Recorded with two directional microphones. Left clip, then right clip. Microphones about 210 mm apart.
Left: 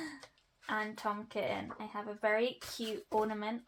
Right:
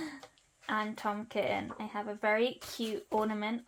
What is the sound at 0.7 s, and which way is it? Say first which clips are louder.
Speech: right 2 dB; 35° right (ahead or behind).